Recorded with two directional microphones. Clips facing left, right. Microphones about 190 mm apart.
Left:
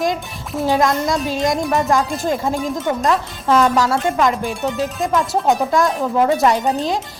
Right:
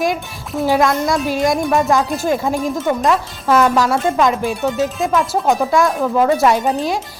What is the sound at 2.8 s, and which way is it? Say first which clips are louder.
Speech: right 2 dB; 10° right (ahead or behind).